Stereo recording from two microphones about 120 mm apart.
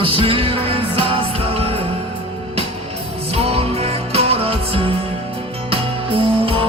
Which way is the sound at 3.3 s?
55° right (ahead or behind).